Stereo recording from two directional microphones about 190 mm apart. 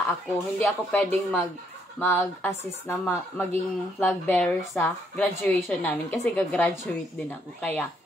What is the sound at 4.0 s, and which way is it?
A woman's voice, 10° left (ahead or behind).